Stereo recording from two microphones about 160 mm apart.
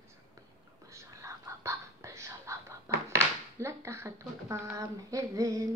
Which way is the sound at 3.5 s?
15° right (ahead or behind).